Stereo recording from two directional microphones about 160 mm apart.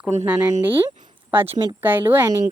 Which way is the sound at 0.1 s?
45° right (ahead or behind).